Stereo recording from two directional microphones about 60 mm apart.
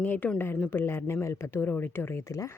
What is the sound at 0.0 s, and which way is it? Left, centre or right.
Speech, left.